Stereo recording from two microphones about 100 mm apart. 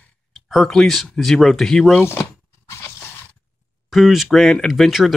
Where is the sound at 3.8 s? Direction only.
Centre (ahead or behind).